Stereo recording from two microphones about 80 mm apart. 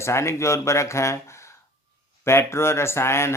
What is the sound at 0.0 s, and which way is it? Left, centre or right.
Speech, left.